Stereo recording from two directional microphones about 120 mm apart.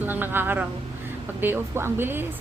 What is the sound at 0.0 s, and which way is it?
A woman's voice, 15° right (ahead or behind).